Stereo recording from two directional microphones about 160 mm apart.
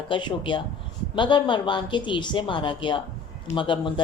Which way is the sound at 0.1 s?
30° left (ahead or behind).